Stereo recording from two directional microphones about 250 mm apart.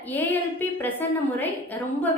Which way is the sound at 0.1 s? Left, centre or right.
Centre.